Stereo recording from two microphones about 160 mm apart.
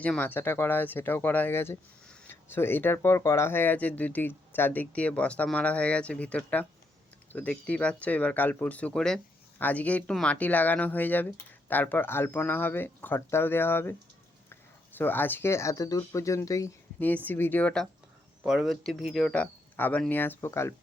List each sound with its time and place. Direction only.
0.0 s speech: 10° left (ahead or behind)
18.4 s speech: 5° right (ahead or behind); by 20.7 s 15° left (ahead or behind)